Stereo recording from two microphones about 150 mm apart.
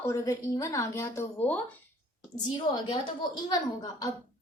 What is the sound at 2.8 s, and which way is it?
A woman's voice, 30° left (ahead or behind).